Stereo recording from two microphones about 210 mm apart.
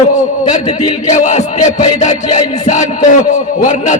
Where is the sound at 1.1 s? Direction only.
35° left (ahead or behind).